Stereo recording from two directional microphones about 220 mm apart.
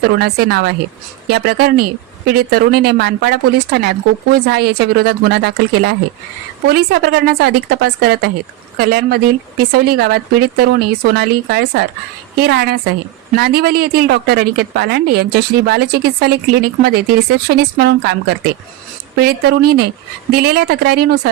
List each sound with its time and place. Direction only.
0.0 s a woman's voice: 50° right (ahead or behind)